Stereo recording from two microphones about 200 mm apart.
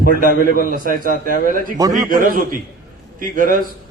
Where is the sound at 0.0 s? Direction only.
45° right (ahead or behind).